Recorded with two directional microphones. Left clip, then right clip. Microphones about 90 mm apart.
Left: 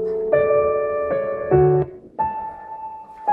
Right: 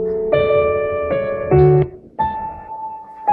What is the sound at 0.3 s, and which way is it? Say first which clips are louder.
Music: right 2 dB; 10° left (ahead or behind).